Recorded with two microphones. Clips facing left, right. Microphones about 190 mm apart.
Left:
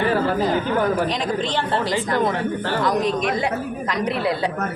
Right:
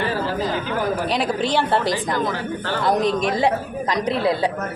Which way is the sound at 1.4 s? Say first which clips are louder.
Right 3 dB; 10° right (ahead or behind).